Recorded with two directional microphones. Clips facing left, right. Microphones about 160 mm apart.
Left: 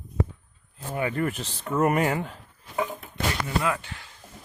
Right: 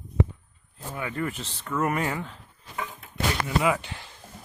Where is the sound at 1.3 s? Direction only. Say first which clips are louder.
Left 2 dB; 10° left (ahead or behind).